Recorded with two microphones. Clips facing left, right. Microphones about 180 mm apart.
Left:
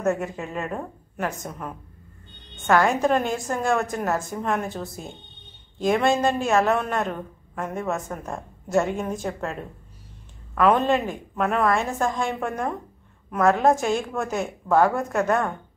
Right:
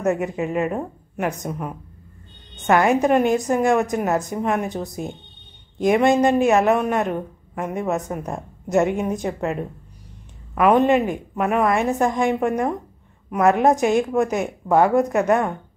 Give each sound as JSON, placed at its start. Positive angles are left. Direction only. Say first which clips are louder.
{"t": 0.2, "sound": "a woman's voice", "louder": "right 7 dB", "side_deg": -15}